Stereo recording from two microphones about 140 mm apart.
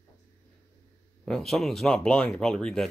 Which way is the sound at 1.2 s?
5° left (ahead or behind).